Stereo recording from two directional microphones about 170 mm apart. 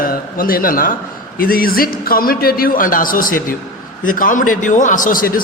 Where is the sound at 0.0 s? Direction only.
55° left (ahead or behind).